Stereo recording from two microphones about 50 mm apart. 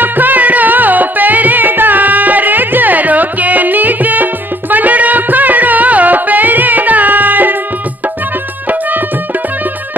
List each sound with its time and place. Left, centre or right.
0.0 s music: right